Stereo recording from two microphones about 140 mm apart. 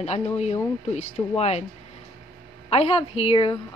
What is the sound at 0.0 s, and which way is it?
A woman's voice, 50° left (ahead or behind).